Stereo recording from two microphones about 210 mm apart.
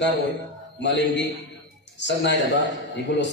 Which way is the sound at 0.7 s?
55° left (ahead or behind).